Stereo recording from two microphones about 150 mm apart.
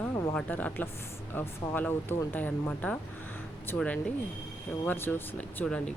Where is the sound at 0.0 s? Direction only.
20° left (ahead or behind).